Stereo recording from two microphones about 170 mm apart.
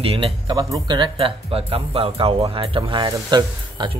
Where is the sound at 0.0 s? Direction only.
35° right (ahead or behind).